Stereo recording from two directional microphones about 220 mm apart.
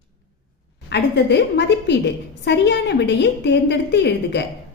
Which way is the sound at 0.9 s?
50° left (ahead or behind).